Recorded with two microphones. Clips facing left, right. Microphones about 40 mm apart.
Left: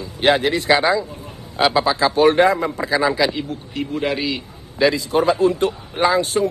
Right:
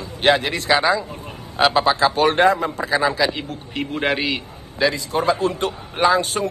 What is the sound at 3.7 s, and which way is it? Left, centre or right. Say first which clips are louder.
Speech: right 1 dB; right.